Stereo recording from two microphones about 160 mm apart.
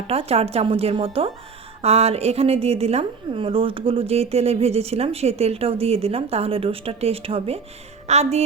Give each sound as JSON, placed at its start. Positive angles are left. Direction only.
{"t": 0.1, "sound": "a woman's voice", "side_deg": -40}